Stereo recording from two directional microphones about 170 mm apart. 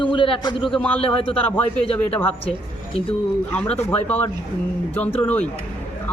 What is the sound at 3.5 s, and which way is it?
A man's voice, 10° left (ahead or behind).